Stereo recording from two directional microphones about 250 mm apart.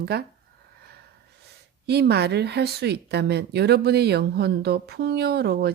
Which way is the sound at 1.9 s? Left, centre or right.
Right.